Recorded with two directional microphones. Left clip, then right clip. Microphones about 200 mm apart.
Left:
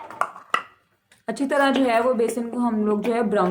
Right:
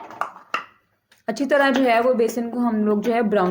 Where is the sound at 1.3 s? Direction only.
10° right (ahead or behind).